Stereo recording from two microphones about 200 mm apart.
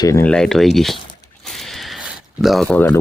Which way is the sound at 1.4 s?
Centre (ahead or behind).